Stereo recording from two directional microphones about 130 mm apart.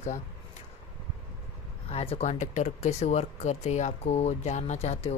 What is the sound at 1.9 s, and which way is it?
Speech, 50° left (ahead or behind).